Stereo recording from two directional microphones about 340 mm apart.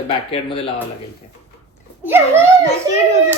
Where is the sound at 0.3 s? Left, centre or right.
Centre.